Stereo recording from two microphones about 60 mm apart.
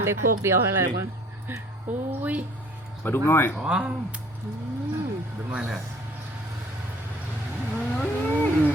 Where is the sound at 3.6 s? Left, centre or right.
Centre.